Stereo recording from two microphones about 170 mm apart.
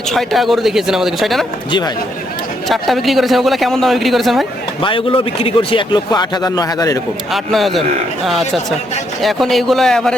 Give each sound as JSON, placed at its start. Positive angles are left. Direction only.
{"t": 0.1, "sound": "a man's voice", "side_deg": 0}
{"t": 2.6, "sound": "a man's voice", "side_deg": 0}
{"t": 4.8, "sound": "a man's voice", "side_deg": 30}
{"t": 7.3, "sound": "a man's voice", "side_deg": 0}